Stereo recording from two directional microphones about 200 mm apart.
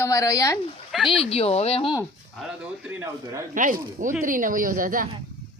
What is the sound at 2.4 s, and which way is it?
A man's voice, 5° right (ahead or behind).